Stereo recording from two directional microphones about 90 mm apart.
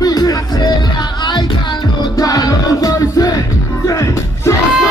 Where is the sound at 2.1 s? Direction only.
40° left (ahead or behind).